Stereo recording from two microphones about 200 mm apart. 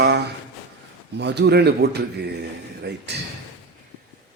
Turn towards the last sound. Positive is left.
turn(degrees=-55)  # may be behind; listen again after turning